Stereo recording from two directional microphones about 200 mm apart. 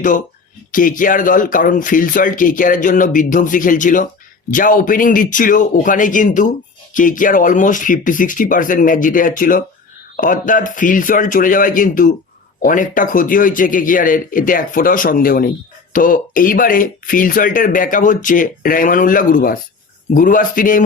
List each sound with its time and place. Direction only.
0.7 s speech: 45° left (ahead or behind)